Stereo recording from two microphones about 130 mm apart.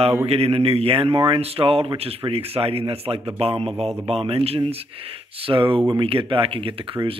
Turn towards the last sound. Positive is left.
turn(degrees=-45)  # may be behind; listen again after turning